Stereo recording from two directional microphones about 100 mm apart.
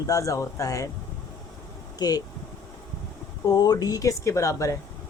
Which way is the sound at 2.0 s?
40° left (ahead or behind).